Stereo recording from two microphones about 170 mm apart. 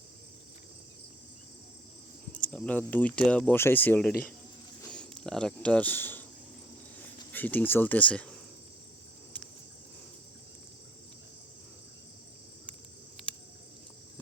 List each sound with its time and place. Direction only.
2.3 s speech: 5° left (ahead or behind)
4.9 s a sound: 5° left (ahead or behind)
7.3 s speech: 10° left (ahead or behind)